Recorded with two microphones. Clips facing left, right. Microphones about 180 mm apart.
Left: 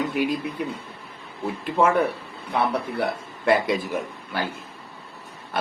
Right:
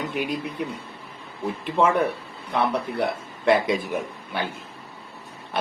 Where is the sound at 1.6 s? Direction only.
Centre (ahead or behind).